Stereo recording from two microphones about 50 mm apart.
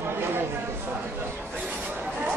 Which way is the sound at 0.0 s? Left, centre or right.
Right.